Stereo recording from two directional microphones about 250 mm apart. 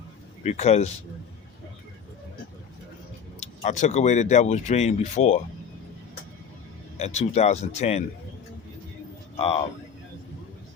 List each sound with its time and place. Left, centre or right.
0.4 s speech: left
3.4 s speech: left
6.9 s speech: left
9.4 s speech: left